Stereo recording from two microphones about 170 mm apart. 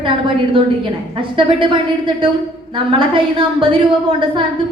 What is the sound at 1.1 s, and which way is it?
A woman's voice, 30° right (ahead or behind).